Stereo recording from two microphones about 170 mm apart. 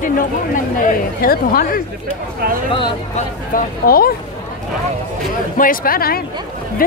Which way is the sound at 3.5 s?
60° left (ahead or behind).